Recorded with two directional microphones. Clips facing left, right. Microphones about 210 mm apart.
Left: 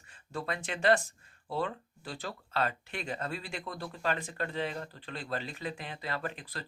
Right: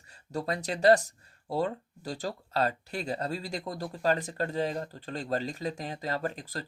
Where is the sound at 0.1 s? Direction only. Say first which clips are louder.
Right 4 dB; 40° right (ahead or behind).